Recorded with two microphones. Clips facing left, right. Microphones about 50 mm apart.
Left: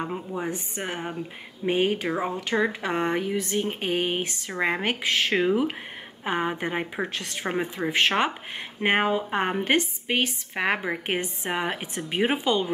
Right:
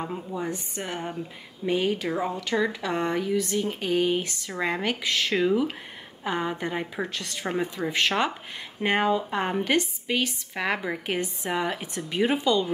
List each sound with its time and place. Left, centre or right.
0.0 s speech: centre
2.0 s speech: left